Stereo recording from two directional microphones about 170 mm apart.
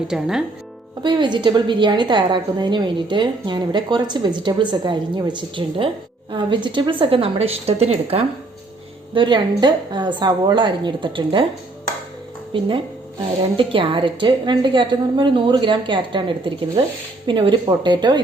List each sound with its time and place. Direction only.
0.1 s speech: 5° right (ahead or behind)
1.0 s a woman's voice: 25° right (ahead or behind)
12.5 s a woman's voice: 30° right (ahead or behind)